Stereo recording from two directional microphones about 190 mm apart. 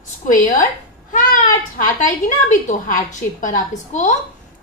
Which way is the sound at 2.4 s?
40° left (ahead or behind).